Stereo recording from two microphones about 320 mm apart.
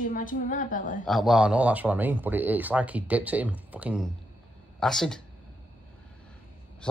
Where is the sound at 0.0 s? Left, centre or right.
Left.